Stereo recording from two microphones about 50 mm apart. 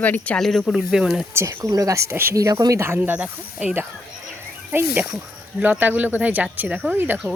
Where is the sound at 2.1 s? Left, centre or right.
Right.